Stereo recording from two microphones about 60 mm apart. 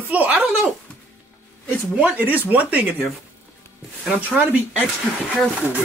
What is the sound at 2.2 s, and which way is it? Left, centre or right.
Speech, right.